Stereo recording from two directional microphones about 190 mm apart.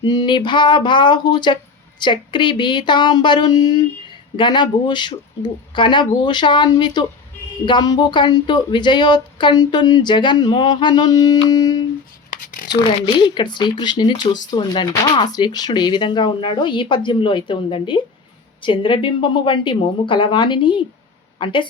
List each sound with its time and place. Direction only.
0.0 s speech: 25° left (ahead or behind)
12.3 s writing: 45° left (ahead or behind)
13.1 s speech: 25° left (ahead or behind)